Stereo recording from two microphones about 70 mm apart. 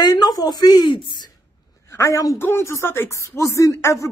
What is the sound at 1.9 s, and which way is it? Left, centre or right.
Speech, left.